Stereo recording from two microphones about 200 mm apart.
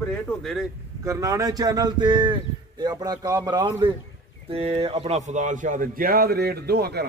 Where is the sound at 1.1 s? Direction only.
15° right (ahead or behind).